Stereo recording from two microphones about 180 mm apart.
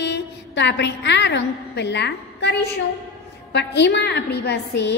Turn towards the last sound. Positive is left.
turn(degrees=70)  # may be behind; listen again after turning